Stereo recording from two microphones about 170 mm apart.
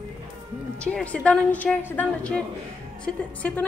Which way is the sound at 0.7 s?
5° left (ahead or behind).